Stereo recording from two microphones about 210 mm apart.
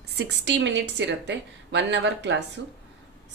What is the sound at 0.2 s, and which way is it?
A woman's voice, 55° right (ahead or behind).